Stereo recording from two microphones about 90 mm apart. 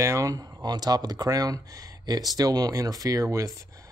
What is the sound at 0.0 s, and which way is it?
Speech, 35° right (ahead or behind).